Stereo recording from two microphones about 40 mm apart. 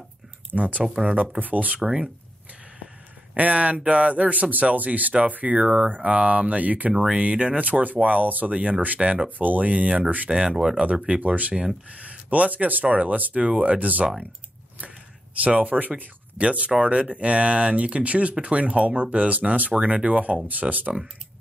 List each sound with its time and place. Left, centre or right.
0.5 s speech: right
1.8 s speech: right
3.3 s speech: right
7.2 s speech: right
7.6 s speech: right
9.0 s speech: right
9.4 s speech: right
10.3 s speech: centre
11.1 s speech: right
15.4 s speech: right
19.7 s speech: right
20.6 s speech: centre